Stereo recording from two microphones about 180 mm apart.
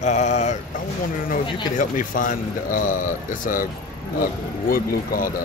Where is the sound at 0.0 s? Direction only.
40° left (ahead or behind).